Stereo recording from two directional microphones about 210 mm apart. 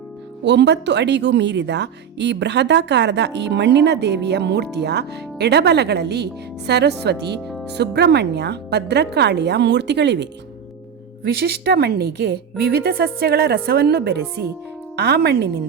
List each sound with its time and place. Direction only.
0.4 s a woman's voice: 55° right (ahead or behind)
11.3 s a woman's voice: 50° right (ahead or behind)